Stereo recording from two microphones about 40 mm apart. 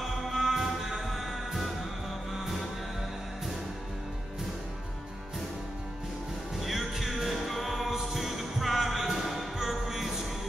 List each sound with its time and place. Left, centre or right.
0.0 s music: centre
6.6 s music: centre